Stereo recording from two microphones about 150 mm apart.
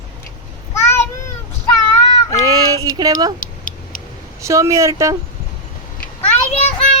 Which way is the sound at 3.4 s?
65° left (ahead or behind).